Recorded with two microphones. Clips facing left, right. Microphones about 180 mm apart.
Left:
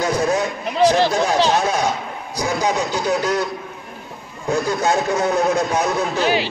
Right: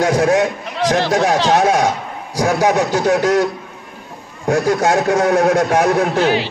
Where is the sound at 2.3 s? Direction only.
75° right (ahead or behind).